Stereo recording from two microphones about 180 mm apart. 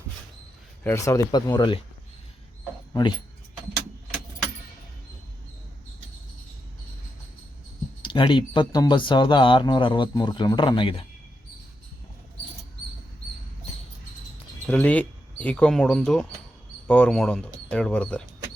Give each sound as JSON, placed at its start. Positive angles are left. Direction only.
{"t": 0.9, "sound": "speech", "side_deg": 15}
{"t": 8.0, "sound": "speech", "side_deg": 25}
{"t": 14.7, "sound": "speech", "side_deg": 10}